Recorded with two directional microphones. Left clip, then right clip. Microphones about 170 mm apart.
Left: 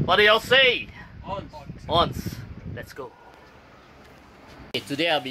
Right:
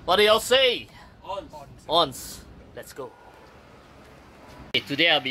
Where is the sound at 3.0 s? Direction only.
Centre (ahead or behind).